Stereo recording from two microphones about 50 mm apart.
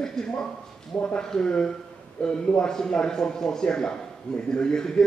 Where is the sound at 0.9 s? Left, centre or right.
Left.